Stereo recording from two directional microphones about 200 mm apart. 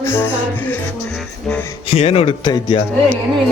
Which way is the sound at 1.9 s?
30° left (ahead or behind).